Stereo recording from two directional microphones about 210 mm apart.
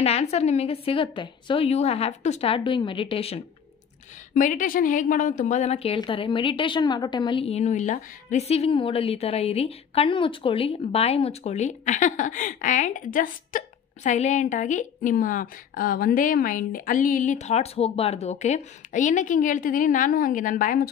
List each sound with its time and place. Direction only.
0.0 s a woman's voice: 30° left (ahead or behind)
4.3 s a woman's voice: 40° left (ahead or behind)